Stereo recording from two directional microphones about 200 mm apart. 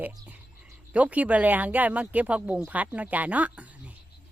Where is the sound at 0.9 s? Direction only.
5° right (ahead or behind).